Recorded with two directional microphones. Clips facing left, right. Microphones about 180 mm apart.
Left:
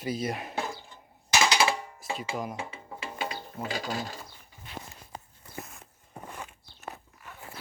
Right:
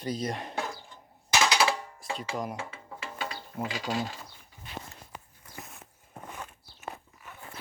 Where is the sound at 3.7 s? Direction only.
40° left (ahead or behind).